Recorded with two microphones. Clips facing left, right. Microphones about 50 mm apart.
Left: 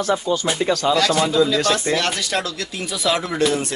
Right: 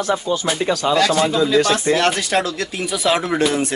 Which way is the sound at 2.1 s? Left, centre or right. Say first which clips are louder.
Right 4 dB; right.